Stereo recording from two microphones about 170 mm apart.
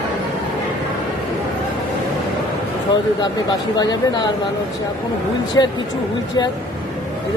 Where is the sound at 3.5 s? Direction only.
25° left (ahead or behind).